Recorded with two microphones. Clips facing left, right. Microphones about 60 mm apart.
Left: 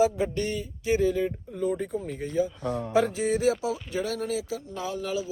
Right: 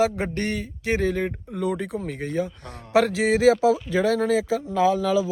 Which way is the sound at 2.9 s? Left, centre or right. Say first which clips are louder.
Right 6 dB; right.